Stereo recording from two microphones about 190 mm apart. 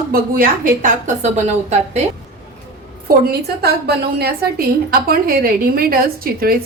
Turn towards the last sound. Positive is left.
turn(degrees=-50)  # may be behind; listen again after turning